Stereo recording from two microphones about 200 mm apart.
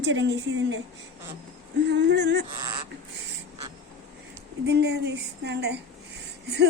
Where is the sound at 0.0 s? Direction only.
65° right (ahead or behind).